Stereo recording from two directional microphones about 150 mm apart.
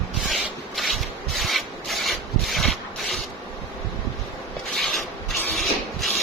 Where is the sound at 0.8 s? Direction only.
Centre (ahead or behind).